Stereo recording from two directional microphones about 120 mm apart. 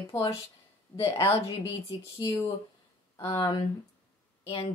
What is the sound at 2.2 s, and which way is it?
A woman's voice, 40° left (ahead or behind).